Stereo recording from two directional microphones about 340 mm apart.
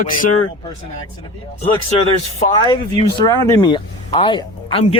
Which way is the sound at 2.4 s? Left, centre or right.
Centre.